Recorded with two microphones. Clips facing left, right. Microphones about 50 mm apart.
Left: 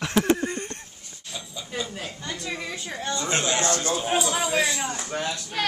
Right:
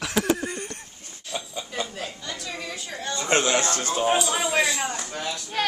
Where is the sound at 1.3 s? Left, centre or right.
Right.